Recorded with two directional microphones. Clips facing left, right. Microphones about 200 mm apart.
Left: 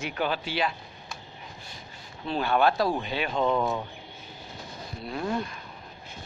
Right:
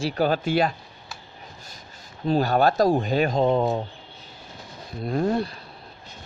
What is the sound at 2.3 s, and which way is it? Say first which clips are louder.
Speech: right 4 dB; 40° right (ahead or behind).